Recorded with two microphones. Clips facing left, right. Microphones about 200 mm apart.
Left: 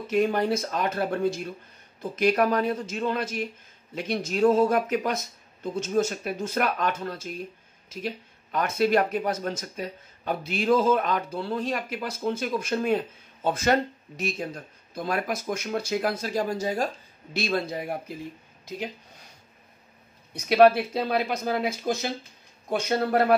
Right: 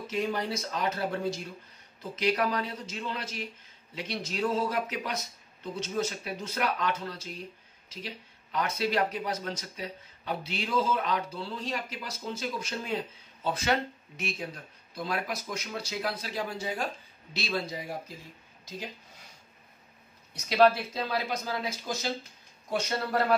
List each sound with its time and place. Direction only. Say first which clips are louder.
0.1 s speech: left 8 dB; 55° left (ahead or behind)
20.3 s speech: left 5 dB; 55° left (ahead or behind)